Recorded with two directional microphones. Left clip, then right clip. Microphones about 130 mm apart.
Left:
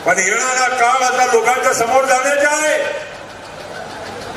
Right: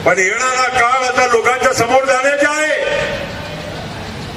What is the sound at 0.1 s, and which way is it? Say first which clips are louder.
A man's voice: even; 20° right (ahead or behind).